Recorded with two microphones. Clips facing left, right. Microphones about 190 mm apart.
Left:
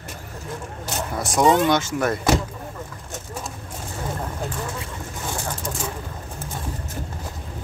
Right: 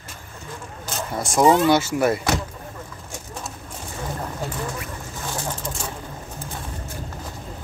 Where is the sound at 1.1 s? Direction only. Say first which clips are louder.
Right 1 dB; centre (ahead or behind).